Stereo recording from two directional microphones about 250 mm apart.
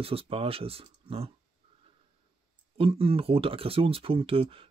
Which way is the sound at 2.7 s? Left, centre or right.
Right.